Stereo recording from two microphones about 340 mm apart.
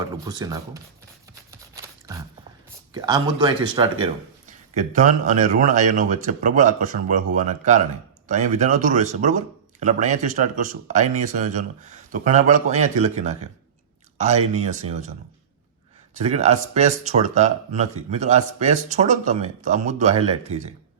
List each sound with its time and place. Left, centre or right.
0.0 s speech: centre
1.5 s a sound: centre
2.9 s speech: centre
16.1 s speech: centre